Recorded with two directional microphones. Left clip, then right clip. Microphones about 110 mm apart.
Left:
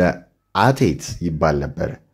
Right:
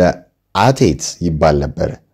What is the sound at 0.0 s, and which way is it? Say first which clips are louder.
Speech: right 5 dB; 25° right (ahead or behind).